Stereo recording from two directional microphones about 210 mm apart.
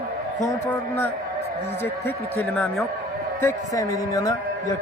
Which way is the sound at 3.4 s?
15° left (ahead or behind).